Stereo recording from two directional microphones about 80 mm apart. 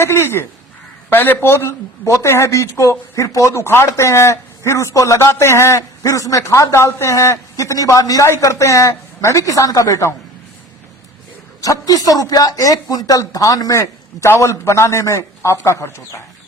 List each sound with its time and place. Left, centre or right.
0.0 s a woman's voice: left
11.6 s speech: left